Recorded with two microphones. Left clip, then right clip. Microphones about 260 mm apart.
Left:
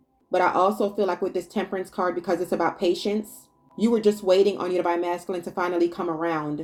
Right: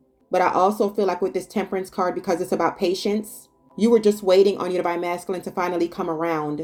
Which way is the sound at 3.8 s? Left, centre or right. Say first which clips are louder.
Right 4 dB; right.